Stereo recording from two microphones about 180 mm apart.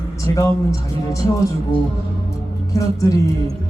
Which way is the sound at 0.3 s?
20° left (ahead or behind).